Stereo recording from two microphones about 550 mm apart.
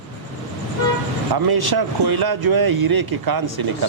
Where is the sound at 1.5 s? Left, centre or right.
Right.